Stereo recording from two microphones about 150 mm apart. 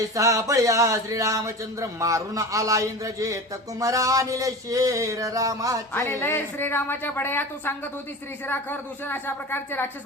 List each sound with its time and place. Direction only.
0.2 s speech: 20° right (ahead or behind)
5.9 s a woman's voice: 15° left (ahead or behind)